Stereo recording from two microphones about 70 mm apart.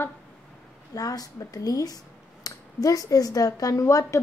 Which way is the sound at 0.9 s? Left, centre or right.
Left.